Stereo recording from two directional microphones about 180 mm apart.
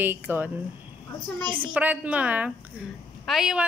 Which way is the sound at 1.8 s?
10° right (ahead or behind).